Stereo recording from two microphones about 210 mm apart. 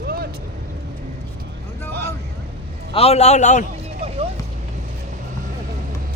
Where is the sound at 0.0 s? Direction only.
45° right (ahead or behind).